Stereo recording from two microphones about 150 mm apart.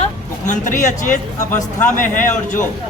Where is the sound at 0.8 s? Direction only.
60° left (ahead or behind).